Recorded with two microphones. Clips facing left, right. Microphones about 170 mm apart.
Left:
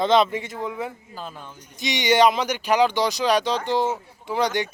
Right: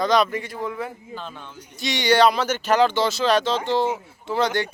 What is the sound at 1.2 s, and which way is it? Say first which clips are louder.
Speech: left 5 dB; 5° left (ahead or behind).